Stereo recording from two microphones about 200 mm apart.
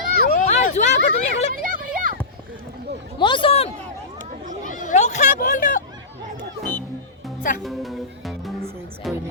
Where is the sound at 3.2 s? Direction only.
25° left (ahead or behind).